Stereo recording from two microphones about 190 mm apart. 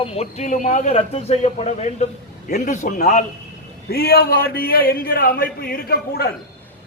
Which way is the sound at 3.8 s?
55° left (ahead or behind).